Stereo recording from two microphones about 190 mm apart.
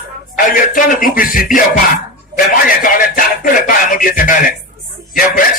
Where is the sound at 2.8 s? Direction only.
45° left (ahead or behind).